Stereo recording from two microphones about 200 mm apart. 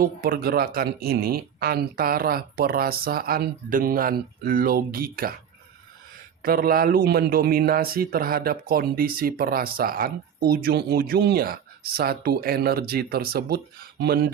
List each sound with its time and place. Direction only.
0.0 s speech: 45° right (ahead or behind)
6.4 s speech: 50° right (ahead or behind)